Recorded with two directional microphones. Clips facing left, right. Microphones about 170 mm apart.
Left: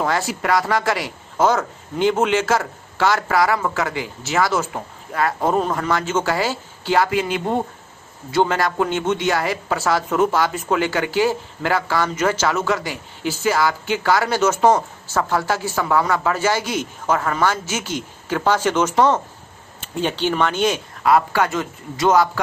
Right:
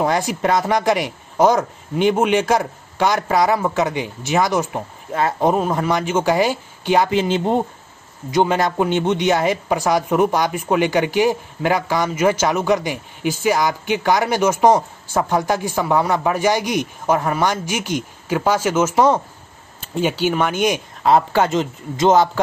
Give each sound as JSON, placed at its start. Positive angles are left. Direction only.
{"t": 0.0, "sound": "speech", "side_deg": -20}
{"t": 8.3, "sound": "speech", "side_deg": -15}
{"t": 21.0, "sound": "speech", "side_deg": -25}